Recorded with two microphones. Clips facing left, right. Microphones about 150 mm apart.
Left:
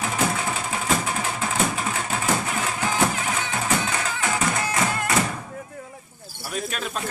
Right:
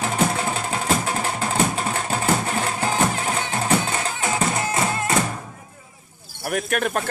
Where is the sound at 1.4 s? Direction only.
35° right (ahead or behind).